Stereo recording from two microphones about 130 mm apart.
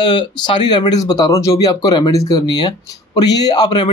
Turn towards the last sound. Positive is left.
turn(degrees=35)  # may be behind; listen again after turning